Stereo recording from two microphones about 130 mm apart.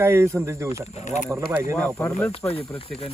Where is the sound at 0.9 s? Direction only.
60° left (ahead or behind).